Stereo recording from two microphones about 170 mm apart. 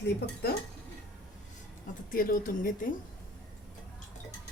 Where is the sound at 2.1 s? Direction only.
55° left (ahead or behind).